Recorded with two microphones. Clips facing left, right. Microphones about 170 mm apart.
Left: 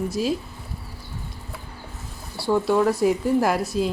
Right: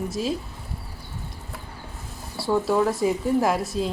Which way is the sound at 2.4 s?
Centre (ahead or behind).